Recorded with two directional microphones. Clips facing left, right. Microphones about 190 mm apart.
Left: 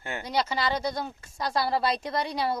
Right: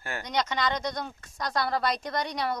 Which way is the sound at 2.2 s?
30° left (ahead or behind).